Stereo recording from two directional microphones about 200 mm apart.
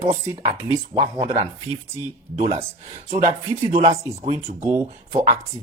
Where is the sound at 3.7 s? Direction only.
30° right (ahead or behind).